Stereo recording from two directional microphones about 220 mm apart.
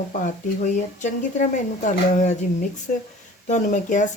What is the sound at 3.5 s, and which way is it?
Speech, 35° left (ahead or behind).